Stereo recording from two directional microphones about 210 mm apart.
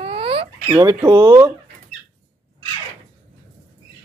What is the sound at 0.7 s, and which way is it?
Speech, 15° right (ahead or behind).